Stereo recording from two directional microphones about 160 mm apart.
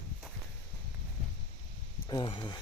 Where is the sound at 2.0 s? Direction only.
30° left (ahead or behind).